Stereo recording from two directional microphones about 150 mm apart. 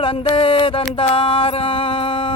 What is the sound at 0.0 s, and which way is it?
Speech, 35° left (ahead or behind).